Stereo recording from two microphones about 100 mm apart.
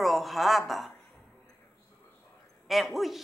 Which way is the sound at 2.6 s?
Centre (ahead or behind).